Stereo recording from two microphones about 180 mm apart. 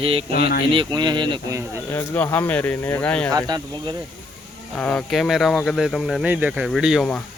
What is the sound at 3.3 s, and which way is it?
Speech, 20° right (ahead or behind).